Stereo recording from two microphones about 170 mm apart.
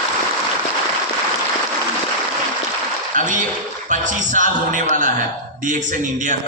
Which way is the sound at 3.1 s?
50° right (ahead or behind).